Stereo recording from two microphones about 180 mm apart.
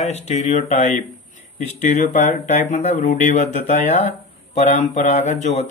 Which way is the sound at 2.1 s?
40° left (ahead or behind).